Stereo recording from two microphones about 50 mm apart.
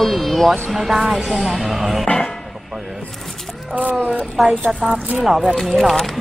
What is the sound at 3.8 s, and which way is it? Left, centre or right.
Speech, right.